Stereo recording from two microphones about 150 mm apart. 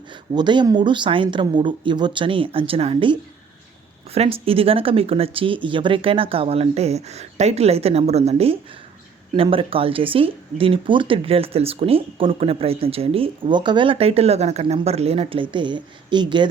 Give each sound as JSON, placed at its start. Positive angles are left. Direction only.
{"t": 0.3, "sound": "speech", "side_deg": -30}